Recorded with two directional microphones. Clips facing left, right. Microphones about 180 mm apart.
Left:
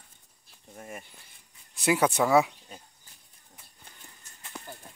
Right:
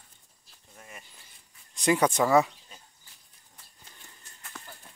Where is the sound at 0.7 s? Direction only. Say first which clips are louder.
Left 7 dB; 45° left (ahead or behind).